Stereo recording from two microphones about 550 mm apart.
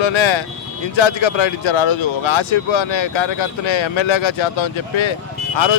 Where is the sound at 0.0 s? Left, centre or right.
Left.